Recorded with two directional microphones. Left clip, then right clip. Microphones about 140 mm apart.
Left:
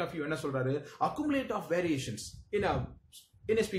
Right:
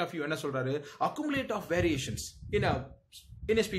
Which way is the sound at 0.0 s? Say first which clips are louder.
Right 1 dB; 35° right (ahead or behind).